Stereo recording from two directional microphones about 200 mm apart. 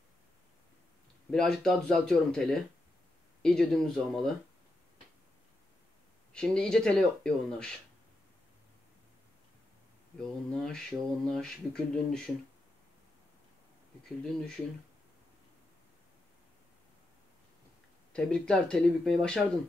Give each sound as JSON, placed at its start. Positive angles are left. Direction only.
{"t": 1.3, "sound": "speech", "side_deg": 5}
{"t": 6.3, "sound": "speech", "side_deg": 5}
{"t": 10.2, "sound": "speech", "side_deg": 5}
{"t": 14.0, "sound": "speech", "side_deg": 5}
{"t": 18.1, "sound": "speech", "side_deg": 5}